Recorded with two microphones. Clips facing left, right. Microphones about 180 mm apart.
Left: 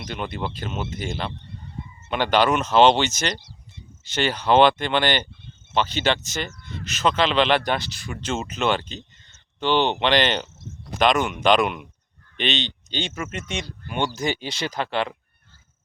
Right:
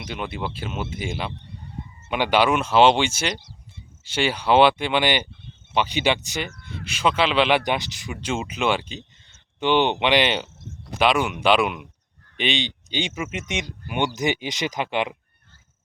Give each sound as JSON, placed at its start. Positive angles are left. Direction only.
{"t": 0.0, "sound": "speech", "side_deg": -5}